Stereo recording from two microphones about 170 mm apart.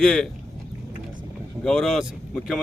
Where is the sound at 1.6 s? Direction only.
Centre (ahead or behind).